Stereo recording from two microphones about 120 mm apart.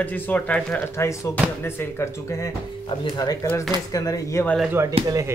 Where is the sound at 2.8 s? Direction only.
35° left (ahead or behind).